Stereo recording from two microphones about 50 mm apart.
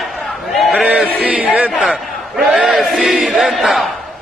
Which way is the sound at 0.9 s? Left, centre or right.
Right.